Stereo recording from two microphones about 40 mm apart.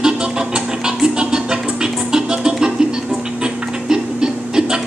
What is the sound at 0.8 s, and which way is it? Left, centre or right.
Music, right.